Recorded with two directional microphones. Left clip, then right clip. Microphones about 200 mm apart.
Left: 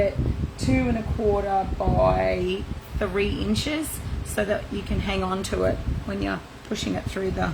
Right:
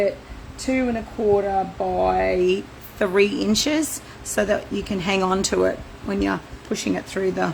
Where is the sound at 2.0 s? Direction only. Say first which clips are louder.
Right 2 dB; 45° right (ahead or behind).